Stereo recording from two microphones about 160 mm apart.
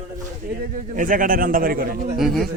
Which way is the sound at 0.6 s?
60° right (ahead or behind).